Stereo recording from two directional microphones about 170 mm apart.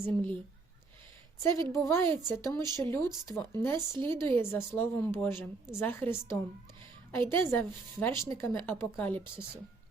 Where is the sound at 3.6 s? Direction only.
15° left (ahead or behind).